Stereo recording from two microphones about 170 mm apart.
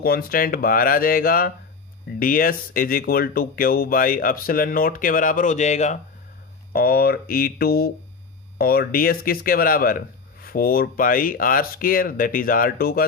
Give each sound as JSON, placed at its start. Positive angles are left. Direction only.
{"t": 0.0, "sound": "speech", "side_deg": 60}
{"t": 6.7, "sound": "speech", "side_deg": 65}